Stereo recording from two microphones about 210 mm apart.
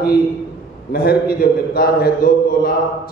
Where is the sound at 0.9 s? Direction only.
45° left (ahead or behind).